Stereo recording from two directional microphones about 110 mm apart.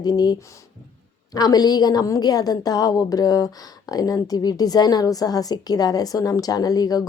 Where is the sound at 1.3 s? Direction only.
35° left (ahead or behind).